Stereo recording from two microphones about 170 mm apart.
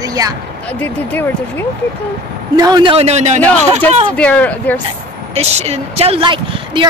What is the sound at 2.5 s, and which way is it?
A man's voice, 25° right (ahead or behind).